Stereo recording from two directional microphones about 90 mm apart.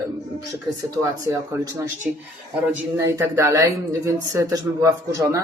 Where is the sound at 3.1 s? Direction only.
30° right (ahead or behind).